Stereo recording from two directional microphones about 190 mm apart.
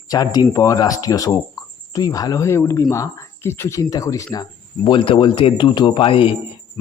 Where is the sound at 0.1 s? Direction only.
20° left (ahead or behind).